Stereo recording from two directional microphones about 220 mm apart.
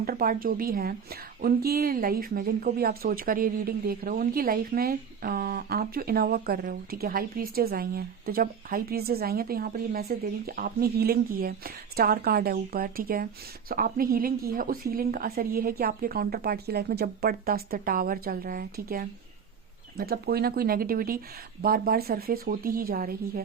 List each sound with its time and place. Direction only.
0.0 s a woman's voice: 40° right (ahead or behind)